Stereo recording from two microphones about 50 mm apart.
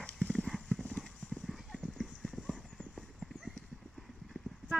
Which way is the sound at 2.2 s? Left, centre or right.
Centre.